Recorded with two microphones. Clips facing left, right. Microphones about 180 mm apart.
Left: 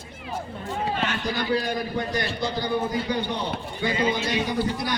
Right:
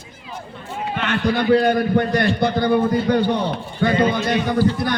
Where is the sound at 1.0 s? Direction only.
60° right (ahead or behind).